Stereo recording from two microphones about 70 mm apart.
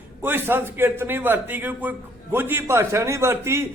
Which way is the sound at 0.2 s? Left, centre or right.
Right.